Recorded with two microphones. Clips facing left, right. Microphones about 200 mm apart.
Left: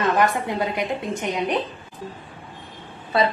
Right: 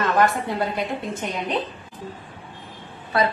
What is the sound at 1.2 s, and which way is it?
Speech, 10° left (ahead or behind).